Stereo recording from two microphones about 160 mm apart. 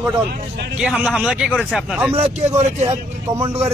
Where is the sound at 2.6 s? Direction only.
45° right (ahead or behind).